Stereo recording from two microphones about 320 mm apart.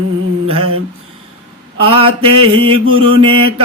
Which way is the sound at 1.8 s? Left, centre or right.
Centre.